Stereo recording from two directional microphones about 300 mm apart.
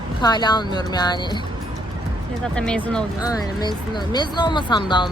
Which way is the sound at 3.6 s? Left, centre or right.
Centre.